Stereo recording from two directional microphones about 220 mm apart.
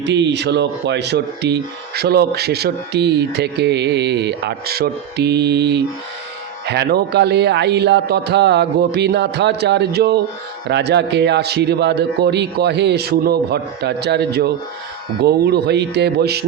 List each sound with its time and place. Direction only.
0.0 s speech: 50° right (ahead or behind)